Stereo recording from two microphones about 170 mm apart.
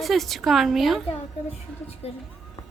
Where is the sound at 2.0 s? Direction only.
35° left (ahead or behind).